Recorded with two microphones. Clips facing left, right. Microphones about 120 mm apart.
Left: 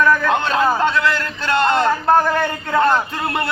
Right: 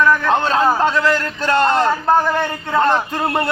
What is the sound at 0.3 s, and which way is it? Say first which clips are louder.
A man's voice: right 2 dB; 35° right (ahead or behind).